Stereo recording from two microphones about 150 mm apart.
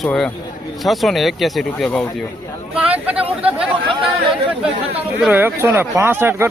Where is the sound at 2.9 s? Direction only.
10° right (ahead or behind).